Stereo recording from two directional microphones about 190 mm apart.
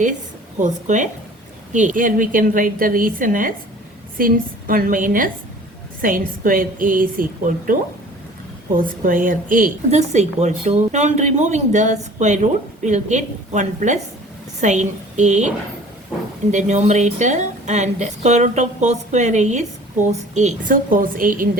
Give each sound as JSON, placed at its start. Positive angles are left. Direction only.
{"t": 0.6, "sound": "a woman's voice", "side_deg": -40}